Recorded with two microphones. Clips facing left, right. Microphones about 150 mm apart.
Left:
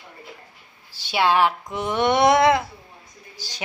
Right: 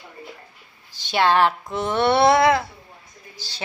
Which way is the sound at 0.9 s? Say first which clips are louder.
Right 1 dB; 10° left (ahead or behind).